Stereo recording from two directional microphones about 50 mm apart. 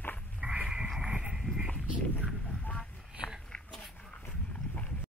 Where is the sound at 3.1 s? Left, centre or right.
Centre.